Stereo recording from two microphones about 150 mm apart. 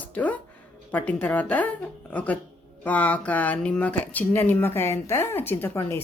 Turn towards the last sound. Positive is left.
turn(degrees=20)  # may be behind; listen again after turning